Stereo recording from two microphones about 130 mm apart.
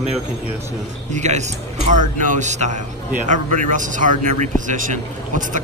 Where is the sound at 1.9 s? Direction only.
75° right (ahead or behind).